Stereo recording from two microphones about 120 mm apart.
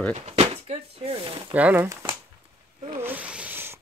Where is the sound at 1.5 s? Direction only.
15° right (ahead or behind).